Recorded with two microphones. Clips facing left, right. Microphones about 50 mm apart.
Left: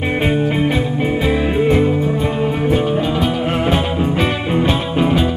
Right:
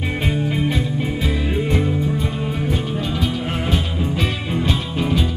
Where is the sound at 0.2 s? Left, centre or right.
Left.